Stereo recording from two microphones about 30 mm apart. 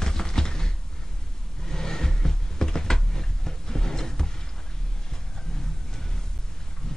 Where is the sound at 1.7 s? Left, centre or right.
Centre.